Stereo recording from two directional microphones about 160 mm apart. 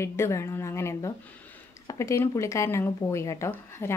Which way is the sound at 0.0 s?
15° left (ahead or behind).